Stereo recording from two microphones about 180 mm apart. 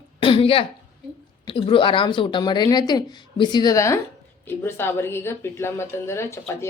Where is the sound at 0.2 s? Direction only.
30° left (ahead or behind).